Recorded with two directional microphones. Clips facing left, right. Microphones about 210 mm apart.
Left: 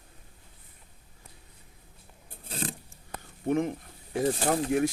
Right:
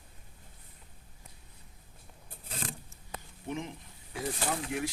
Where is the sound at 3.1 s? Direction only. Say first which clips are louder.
Left 11 dB; 55° left (ahead or behind).